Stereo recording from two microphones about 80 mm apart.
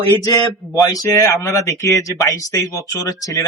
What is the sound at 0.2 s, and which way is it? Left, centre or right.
Speech, left.